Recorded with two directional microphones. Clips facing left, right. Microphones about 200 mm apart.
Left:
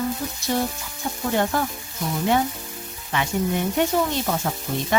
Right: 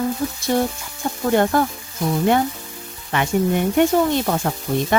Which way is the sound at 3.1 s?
55° right (ahead or behind).